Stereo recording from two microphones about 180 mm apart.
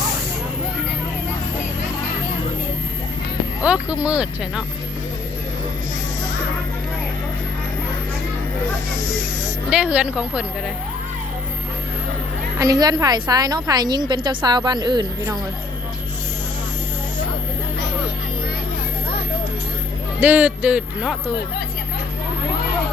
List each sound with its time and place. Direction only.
3.6 s speech: 5° right (ahead or behind)
9.6 s speech: 5° right (ahead or behind)
12.5 s a woman's voice: 20° right (ahead or behind)
20.2 s speech: 10° right (ahead or behind)